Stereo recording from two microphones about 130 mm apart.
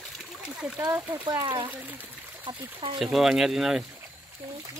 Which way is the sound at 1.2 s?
30° right (ahead or behind).